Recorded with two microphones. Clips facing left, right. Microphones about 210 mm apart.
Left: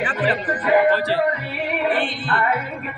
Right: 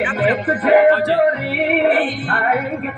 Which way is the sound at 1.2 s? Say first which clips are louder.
Right 6 dB; 60° right (ahead or behind).